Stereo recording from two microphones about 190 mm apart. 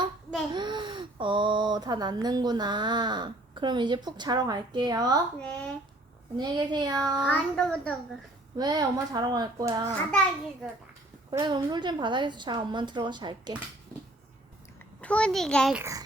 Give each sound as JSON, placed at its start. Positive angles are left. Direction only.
{"t": 0.5, "sound": "speech", "side_deg": -25}
{"t": 5.4, "sound": "a child's voice", "side_deg": 5}
{"t": 6.3, "sound": "speech", "side_deg": -20}
{"t": 7.3, "sound": "a child's voice", "side_deg": 5}
{"t": 8.5, "sound": "speech", "side_deg": -20}
{"t": 11.3, "sound": "speech", "side_deg": -25}
{"t": 15.0, "sound": "a child's voice", "side_deg": 5}
{"t": 15.8, "sound": "a child's voice", "side_deg": -15}